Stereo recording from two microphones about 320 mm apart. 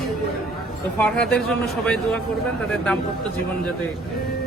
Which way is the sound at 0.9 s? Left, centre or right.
Centre.